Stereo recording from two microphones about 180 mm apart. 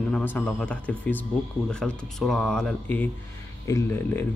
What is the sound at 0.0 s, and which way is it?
Speech, 10° left (ahead or behind).